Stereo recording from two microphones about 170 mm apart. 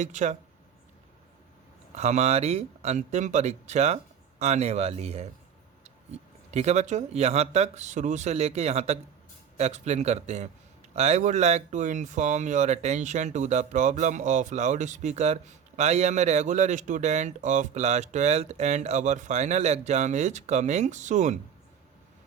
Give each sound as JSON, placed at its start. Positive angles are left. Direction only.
{"t": 0.0, "sound": "speech", "side_deg": -45}
{"t": 2.0, "sound": "speech", "side_deg": -40}